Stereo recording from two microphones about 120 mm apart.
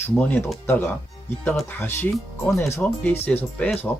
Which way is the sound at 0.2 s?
15° left (ahead or behind).